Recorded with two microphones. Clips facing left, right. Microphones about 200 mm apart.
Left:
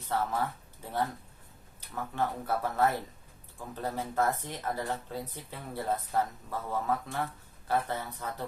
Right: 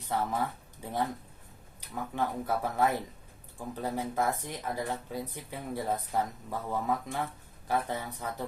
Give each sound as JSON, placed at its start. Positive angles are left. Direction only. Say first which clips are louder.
{"t": 0.0, "sound": "speech", "louder": "even", "side_deg": -15}
{"t": 2.1, "sound": "speech", "louder": "even", "side_deg": -15}